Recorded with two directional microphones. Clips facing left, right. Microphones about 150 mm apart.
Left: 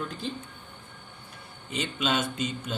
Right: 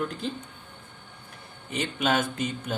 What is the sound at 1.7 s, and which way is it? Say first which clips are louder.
Speech: right 3 dB; 55° right (ahead or behind).